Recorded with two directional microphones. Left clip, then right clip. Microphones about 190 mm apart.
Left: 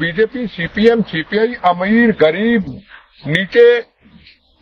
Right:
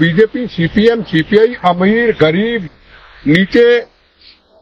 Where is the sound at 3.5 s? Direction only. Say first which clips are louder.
Left 1 dB; 35° left (ahead or behind).